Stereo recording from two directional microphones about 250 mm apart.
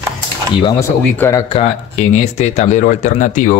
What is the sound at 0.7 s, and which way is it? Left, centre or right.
Speech, centre.